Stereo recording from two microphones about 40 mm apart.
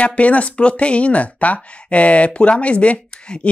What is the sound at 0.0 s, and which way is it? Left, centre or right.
Speech, left.